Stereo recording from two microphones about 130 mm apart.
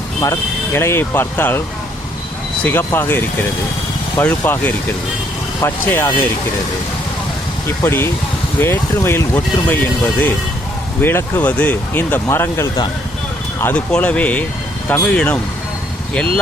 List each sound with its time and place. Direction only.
0.2 s speech: 20° left (ahead or behind)
2.6 s speech: 15° left (ahead or behind)
7.8 s speech: 20° left (ahead or behind)